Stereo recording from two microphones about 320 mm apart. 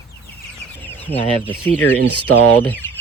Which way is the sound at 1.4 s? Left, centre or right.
Centre.